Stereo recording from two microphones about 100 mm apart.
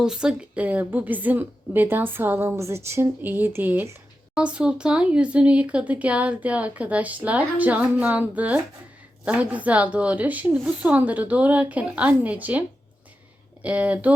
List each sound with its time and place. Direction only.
0.0 s a woman's voice: 5° right (ahead or behind)